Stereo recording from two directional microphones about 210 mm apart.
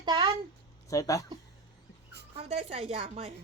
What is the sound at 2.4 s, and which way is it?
Speech, 30° right (ahead or behind).